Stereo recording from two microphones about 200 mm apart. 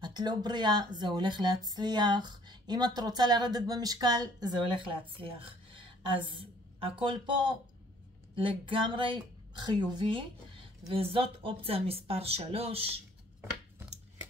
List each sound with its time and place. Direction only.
0.0 s speech: 20° right (ahead or behind)